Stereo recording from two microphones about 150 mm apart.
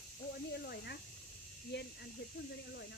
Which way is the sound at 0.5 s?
90° left.